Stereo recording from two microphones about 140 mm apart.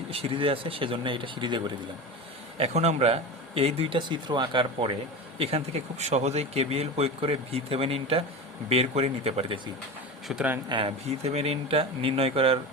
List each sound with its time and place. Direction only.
0.1 s speech: 40° right (ahead or behind)
2.6 s speech: 50° right (ahead or behind)
10.2 s speech: 10° right (ahead or behind)
10.7 s speech: 40° right (ahead or behind)